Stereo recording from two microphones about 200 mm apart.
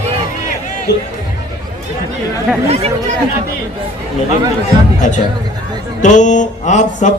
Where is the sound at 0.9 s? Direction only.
55° left (ahead or behind).